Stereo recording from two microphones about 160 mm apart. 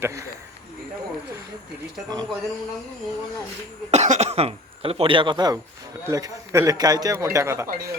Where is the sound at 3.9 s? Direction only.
45° right (ahead or behind).